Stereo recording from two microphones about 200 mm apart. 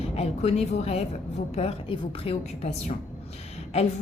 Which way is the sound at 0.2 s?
35° left (ahead or behind).